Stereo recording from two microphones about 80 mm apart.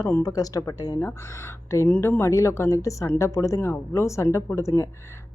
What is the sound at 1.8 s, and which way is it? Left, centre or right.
Speech, left.